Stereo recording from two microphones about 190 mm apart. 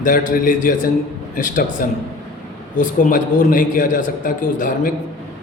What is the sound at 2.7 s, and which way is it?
A man's voice, 45° left (ahead or behind).